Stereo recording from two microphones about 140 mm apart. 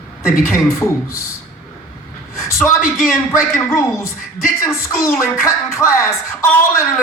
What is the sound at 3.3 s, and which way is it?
A woman's voice, 20° left (ahead or behind).